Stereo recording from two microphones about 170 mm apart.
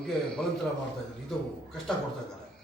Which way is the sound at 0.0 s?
5° left (ahead or behind).